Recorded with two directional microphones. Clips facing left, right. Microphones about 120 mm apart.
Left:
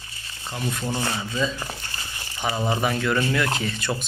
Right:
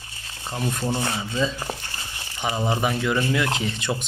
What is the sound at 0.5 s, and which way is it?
Speech, 30° right (ahead or behind).